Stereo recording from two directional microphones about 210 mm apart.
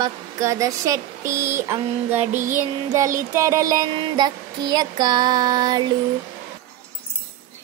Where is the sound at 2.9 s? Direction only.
15° right (ahead or behind).